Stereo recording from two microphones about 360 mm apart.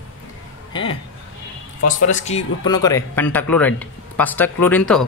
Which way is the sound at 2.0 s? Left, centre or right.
Centre.